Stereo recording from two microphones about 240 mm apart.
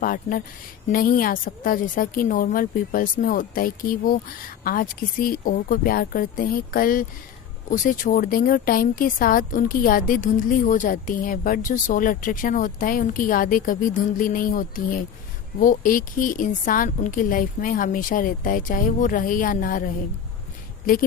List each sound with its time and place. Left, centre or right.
0.0 s speech: left